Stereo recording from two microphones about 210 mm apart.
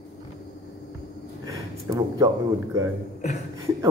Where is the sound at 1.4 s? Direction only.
15° right (ahead or behind).